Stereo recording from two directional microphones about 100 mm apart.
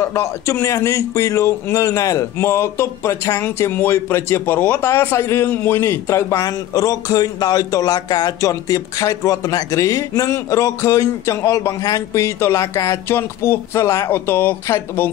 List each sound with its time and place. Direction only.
0.0 s speech: 30° left (ahead or behind)